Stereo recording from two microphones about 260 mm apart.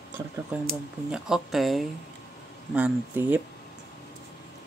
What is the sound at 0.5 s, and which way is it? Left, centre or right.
Speech, centre.